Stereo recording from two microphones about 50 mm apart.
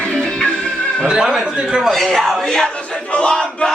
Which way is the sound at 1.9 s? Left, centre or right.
Centre.